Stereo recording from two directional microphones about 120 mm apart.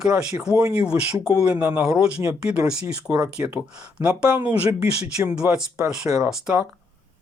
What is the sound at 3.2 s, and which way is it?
Speech, 10° right (ahead or behind).